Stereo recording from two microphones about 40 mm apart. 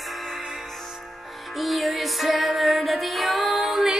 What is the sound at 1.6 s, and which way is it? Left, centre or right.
Music, centre.